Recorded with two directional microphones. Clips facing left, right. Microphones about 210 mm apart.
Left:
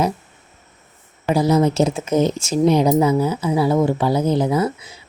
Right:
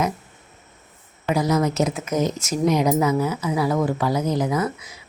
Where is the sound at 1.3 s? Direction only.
30° left (ahead or behind).